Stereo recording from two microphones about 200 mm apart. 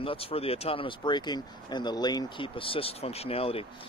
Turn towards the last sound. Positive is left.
turn(degrees=30)  # may be behind; listen again after turning